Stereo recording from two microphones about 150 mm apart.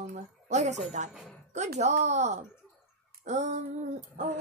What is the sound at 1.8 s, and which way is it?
A woman's voice, 50° right (ahead or behind).